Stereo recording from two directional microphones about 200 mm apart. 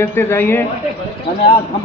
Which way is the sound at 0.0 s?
10° left (ahead or behind).